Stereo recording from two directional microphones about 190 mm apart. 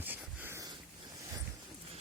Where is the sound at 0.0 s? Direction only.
10° right (ahead or behind).